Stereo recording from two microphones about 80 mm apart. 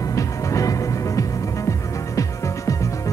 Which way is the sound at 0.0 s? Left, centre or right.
Left.